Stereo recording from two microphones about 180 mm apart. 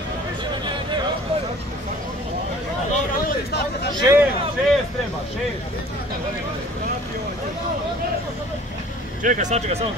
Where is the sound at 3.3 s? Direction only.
65° left (ahead or behind).